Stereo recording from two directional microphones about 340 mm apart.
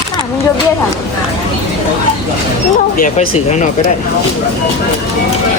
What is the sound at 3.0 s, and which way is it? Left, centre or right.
Speech, left.